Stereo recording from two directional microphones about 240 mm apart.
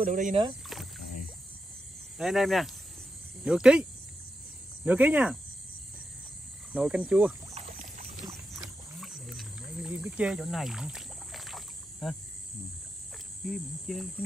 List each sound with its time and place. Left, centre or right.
0.0 s speech: right
0.3 s speech: right
0.7 s rowboat: centre
2.1 s speech: centre
4.8 s speech: centre
6.7 s speech: centre
7.5 s rowboat: right
8.3 s wild animals: centre
13.4 s speech: centre